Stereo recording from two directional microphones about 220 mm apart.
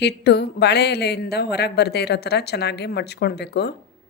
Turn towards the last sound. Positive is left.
turn(degrees=50)  # may be behind; listen again after turning